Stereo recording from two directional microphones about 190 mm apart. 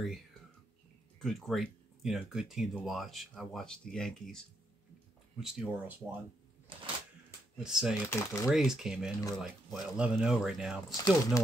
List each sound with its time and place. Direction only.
0.0 s speech: centre (ahead or behind)
5.4 s speech: 5° right (ahead or behind)
6.7 s a sound: 25° right (ahead or behind)
7.5 s speech: 5° right (ahead or behind)
8.1 s speech: 15° left (ahead or behind)
8.5 s speech: centre (ahead or behind)
10.9 s speech: 20° left (ahead or behind)